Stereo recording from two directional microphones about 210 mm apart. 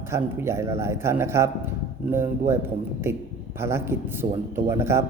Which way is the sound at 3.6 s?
10° right (ahead or behind).